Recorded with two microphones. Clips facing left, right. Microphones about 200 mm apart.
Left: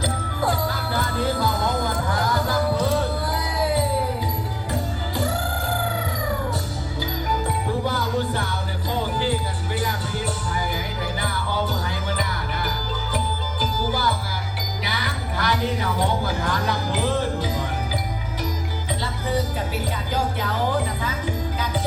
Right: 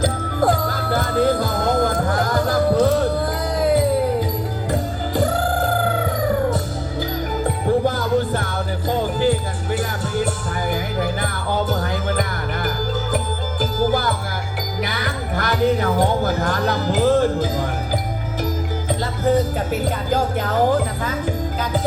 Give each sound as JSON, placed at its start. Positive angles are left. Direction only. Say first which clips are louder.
{"t": 0.0, "sound": "music", "louder": "right 6 dB", "side_deg": -50}
{"t": 7.4, "sound": "music", "louder": "right 10 dB", "side_deg": -50}
{"t": 19.2, "sound": "music", "louder": "right 8 dB", "side_deg": -50}